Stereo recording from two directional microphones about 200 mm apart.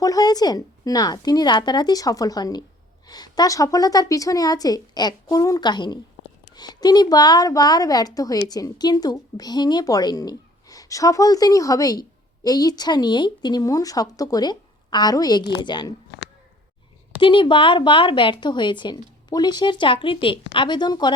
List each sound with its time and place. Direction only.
0.0 s a woman's voice: 20° left (ahead or behind)
17.2 s a woman's voice: 25° left (ahead or behind)